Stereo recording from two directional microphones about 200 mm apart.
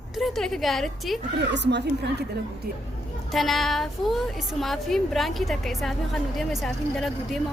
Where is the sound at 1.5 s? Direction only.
60° right (ahead or behind).